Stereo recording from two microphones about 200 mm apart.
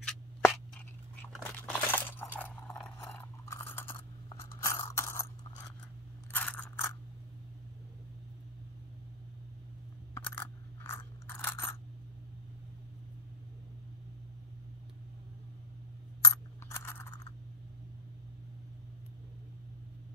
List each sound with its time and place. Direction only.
0.0 s a sound: 5° left (ahead or behind)
3.4 s coin: 10° left (ahead or behind)
6.3 s mechanisms: 5° left (ahead or behind)
10.1 s coin: 10° left (ahead or behind)
16.2 s coin: 15° left (ahead or behind)